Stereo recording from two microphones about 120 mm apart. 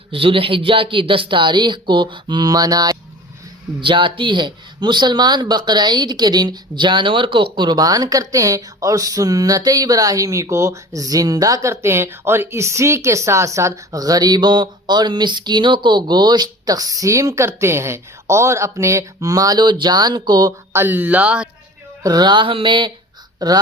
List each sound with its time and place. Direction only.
0.1 s speech: 50° right (ahead or behind)
20.7 s speech: 15° right (ahead or behind)
22.0 s speech: 35° right (ahead or behind)